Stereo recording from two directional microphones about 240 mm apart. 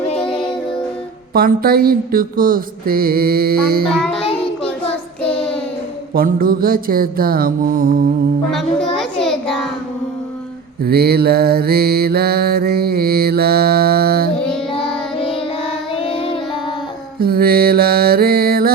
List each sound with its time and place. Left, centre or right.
1.3 s mantra: right
3.8 s a child's voice: centre
4.9 s child singing: left
6.1 s mantra: right
8.4 s a child's voice: centre
9.2 s a sound: centre
10.8 s mantra: right
16.0 s music: left
17.2 s mantra: right